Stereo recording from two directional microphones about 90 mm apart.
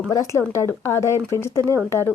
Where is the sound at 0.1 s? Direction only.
35° left (ahead or behind).